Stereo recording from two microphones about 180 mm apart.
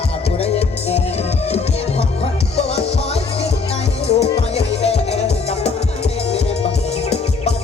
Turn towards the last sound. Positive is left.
turn(degrees=35)  # may be behind; listen again after turning